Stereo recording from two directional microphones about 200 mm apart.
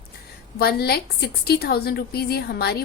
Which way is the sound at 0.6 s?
50° left (ahead or behind).